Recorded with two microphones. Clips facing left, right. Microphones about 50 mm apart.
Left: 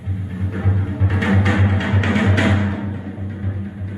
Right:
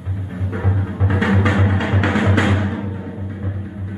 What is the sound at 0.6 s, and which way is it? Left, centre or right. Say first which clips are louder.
Music: even; centre.